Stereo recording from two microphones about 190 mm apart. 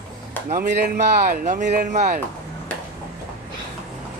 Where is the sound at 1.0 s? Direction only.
45° right (ahead or behind).